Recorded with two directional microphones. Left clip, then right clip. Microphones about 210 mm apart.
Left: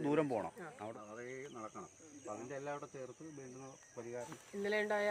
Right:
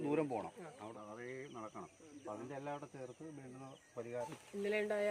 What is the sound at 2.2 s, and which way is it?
Speech, 40° right (ahead or behind).